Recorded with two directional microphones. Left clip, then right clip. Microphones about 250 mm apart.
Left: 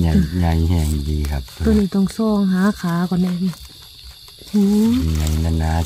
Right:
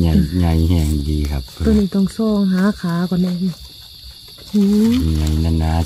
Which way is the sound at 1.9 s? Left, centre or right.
Left.